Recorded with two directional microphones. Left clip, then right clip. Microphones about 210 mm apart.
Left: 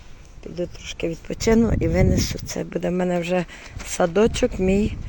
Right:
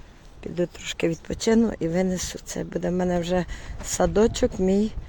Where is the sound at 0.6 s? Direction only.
25° right (ahead or behind).